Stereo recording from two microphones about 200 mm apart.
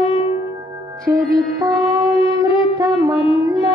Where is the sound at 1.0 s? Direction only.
15° right (ahead or behind).